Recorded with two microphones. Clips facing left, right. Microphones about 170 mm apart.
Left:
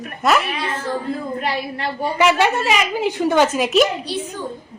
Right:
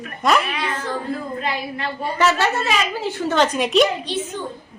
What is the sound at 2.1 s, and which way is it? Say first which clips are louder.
A woman's voice: left 3 dB; 15° left (ahead or behind).